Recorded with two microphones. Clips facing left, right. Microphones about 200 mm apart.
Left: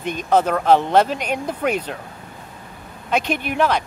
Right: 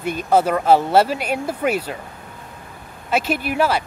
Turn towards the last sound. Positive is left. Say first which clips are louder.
# even
turn(degrees=-5)  # may be behind; listen again after turning